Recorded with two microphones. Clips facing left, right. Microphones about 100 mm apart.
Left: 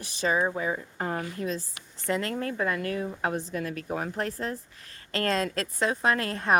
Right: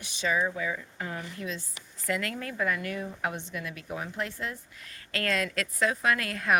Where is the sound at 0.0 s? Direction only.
40° left (ahead or behind).